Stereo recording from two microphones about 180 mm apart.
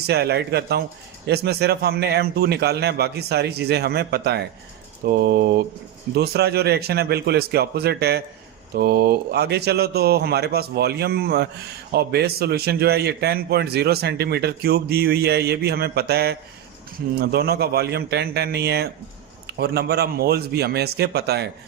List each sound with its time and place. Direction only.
0.0 s a man's voice: 60° right (ahead or behind)